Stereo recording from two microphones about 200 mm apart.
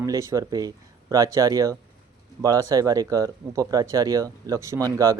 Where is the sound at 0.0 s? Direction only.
15° right (ahead or behind).